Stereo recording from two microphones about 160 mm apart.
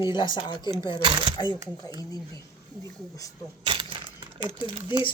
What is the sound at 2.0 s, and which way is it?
Speech, 25° left (ahead or behind).